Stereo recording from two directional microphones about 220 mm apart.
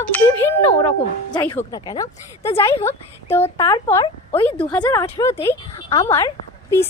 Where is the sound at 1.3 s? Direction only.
10° left (ahead or behind).